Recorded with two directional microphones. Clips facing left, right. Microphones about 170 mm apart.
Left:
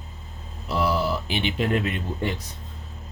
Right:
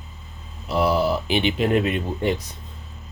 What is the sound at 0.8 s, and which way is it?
Speech, 15° right (ahead or behind).